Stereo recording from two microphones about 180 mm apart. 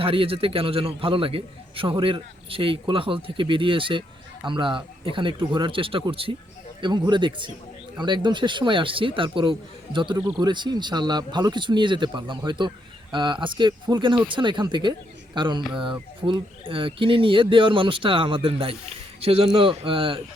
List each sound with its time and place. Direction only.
0.0 s speech: 30° right (ahead or behind)